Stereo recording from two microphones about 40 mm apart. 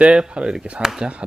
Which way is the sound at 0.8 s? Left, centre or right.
Centre.